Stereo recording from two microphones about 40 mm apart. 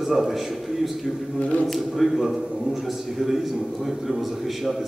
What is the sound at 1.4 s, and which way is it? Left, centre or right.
Speech, left.